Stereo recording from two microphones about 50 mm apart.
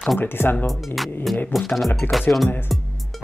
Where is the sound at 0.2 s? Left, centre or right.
Left.